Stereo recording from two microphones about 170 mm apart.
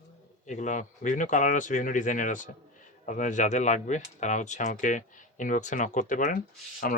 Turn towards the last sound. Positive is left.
turn(degrees=55)  # may be behind; listen again after turning